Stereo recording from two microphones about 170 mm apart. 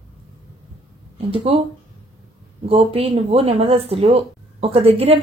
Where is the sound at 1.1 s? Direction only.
35° right (ahead or behind).